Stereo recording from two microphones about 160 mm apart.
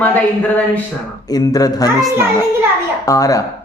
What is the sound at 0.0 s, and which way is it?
Speech, 10° left (ahead or behind).